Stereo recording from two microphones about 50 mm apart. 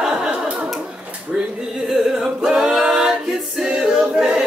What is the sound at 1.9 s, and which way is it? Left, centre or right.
A capella, centre.